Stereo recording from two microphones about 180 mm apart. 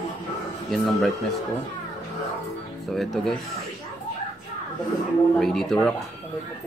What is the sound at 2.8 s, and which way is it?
Speech, centre (ahead or behind).